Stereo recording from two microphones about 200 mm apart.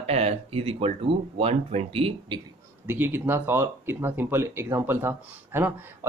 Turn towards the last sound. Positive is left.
turn(degrees=-10)  # may be behind; listen again after turning